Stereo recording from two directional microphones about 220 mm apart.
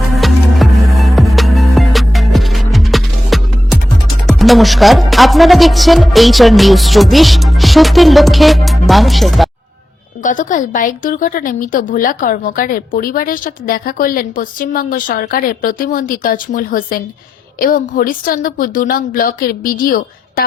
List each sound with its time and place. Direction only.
0.1 s music: centre (ahead or behind)
4.3 s speech: centre (ahead or behind)
10.2 s a woman's voice: 35° left (ahead or behind)